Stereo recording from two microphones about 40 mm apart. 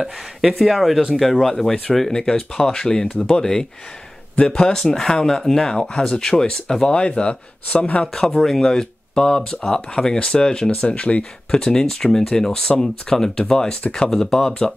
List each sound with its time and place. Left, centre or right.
0.6 s speech: centre; by 8.1 s left
8.1 s speech: centre; by 11.2 s left
11.5 s speech: centre